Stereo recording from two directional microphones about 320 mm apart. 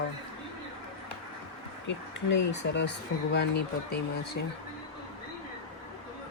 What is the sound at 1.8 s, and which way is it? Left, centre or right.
Speech, left.